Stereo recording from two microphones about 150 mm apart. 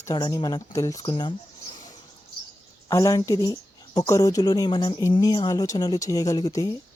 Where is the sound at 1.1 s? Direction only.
35° left (ahead or behind).